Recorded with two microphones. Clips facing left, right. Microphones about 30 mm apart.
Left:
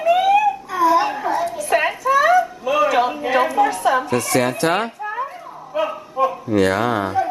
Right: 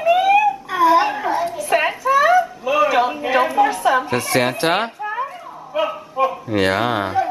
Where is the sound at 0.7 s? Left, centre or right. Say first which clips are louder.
Right 2 dB; right.